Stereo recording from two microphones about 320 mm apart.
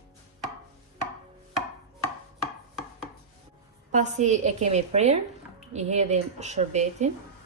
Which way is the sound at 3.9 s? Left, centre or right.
Right.